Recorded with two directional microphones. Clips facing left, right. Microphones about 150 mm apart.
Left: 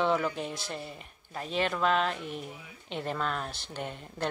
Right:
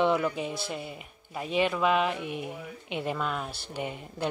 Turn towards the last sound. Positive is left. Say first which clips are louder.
# right 2 dB
turn(degrees=-10)  # may be behind; listen again after turning